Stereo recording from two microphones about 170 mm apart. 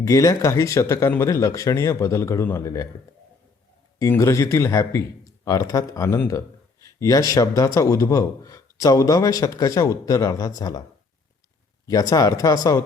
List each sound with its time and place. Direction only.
0.0 s speech: 20° left (ahead or behind)
3.9 s a man's voice: 20° left (ahead or behind)
11.9 s a man's voice: 20° left (ahead or behind)